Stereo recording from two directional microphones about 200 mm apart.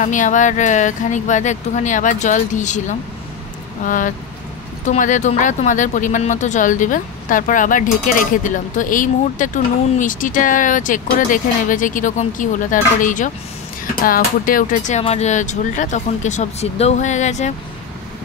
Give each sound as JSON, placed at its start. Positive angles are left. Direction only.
{"t": 0.0, "sound": "speech", "side_deg": 40}